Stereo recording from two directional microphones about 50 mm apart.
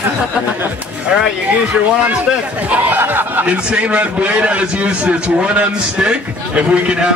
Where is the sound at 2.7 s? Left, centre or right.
Right.